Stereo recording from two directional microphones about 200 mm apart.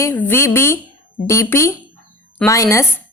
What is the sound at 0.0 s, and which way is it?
Speech, 10° left (ahead or behind).